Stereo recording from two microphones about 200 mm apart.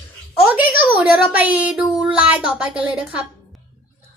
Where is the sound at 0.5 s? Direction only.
5° right (ahead or behind).